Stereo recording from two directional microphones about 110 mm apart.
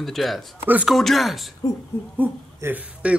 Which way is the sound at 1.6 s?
30° left (ahead or behind).